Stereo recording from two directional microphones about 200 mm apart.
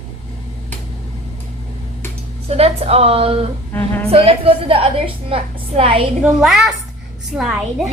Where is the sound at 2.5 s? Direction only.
30° right (ahead or behind).